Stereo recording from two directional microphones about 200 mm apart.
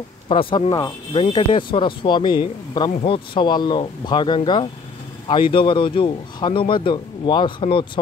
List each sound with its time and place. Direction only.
0.3 s speech: 25° left (ahead or behind)